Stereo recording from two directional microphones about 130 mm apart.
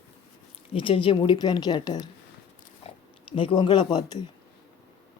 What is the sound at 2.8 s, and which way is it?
Speech, 45° left (ahead or behind).